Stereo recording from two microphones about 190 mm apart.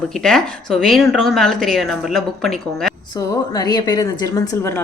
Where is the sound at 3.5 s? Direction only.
20° left (ahead or behind).